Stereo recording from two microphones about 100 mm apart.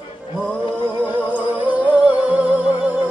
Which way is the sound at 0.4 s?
15° right (ahead or behind).